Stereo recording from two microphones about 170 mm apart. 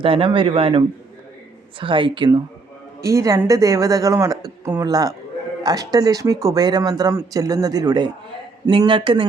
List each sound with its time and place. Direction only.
0.0 s a man's voice: 30° right (ahead or behind)
3.0 s speech: 20° right (ahead or behind)